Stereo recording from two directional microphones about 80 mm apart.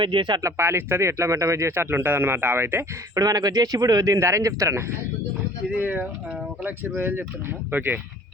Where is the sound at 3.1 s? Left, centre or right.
Right.